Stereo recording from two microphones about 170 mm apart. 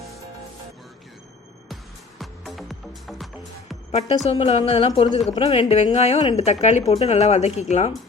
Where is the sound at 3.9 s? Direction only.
40° left (ahead or behind).